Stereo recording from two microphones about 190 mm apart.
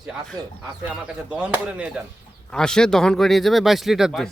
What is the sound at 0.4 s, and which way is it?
Speech, 25° right (ahead or behind).